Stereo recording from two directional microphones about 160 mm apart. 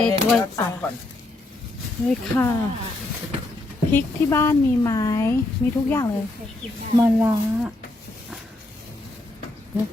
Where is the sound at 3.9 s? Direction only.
15° left (ahead or behind).